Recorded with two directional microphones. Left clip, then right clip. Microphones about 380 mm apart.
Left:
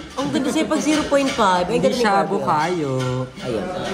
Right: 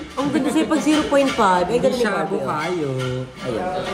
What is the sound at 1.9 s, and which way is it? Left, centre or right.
Speech, left.